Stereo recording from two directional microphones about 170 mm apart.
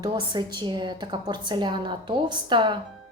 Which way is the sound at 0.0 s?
25° right (ahead or behind).